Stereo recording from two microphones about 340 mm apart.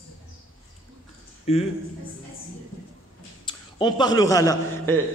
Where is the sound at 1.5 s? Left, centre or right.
Centre.